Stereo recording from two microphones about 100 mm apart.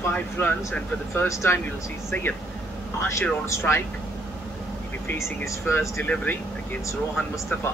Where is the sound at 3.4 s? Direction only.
30° left (ahead or behind).